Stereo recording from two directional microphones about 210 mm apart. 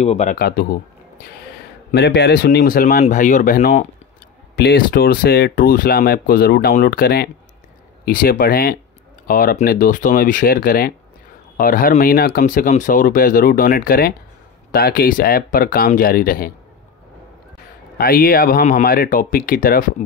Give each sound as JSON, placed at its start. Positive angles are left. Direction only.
{"t": 0.0, "sound": "speech", "side_deg": 30}
{"t": 0.4, "sound": "speech", "side_deg": 50}
{"t": 1.9, "sound": "speech", "side_deg": 50}
{"t": 17.9, "sound": "speech", "side_deg": 45}